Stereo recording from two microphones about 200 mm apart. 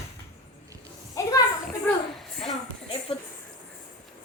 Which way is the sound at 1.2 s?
15° left (ahead or behind).